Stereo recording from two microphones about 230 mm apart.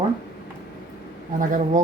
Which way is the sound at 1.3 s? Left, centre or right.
Right.